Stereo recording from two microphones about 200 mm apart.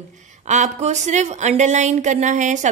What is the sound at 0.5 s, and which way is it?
A woman's voice, 35° right (ahead or behind).